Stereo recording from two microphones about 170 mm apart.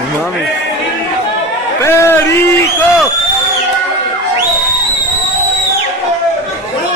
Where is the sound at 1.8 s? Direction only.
15° left (ahead or behind).